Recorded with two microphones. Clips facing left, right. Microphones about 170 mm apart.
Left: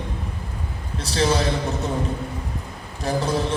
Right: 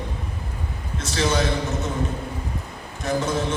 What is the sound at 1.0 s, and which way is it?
Speech, 35° left (ahead or behind).